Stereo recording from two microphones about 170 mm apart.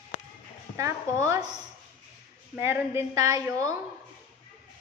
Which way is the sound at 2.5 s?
10° right (ahead or behind).